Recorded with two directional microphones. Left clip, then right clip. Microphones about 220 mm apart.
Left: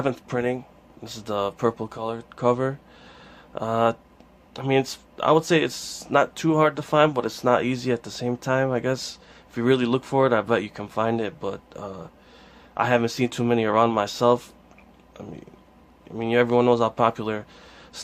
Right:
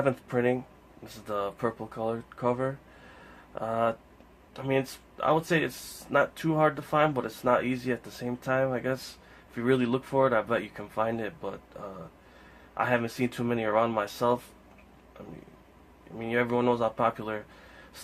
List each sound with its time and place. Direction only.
0.0 s speech: 40° left (ahead or behind)
16.1 s speech: 40° left (ahead or behind)